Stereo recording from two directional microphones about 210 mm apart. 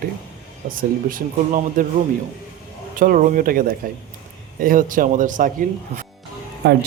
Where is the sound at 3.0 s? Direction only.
40° right (ahead or behind).